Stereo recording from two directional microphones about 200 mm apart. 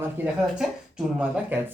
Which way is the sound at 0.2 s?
10° right (ahead or behind).